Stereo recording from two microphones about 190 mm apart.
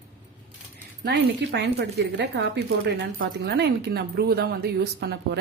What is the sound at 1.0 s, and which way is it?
A woman's voice, 65° right (ahead or behind).